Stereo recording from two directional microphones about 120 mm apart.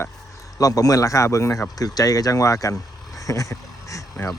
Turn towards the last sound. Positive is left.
turn(degrees=25)  # may be behind; listen again after turning